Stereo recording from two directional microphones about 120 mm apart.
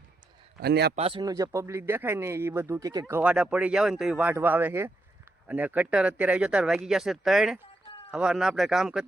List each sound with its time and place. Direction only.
0.9 s speech: 55° right (ahead or behind)
1.2 s speech: 30° right (ahead or behind); by 9.0 s 5° right (ahead or behind)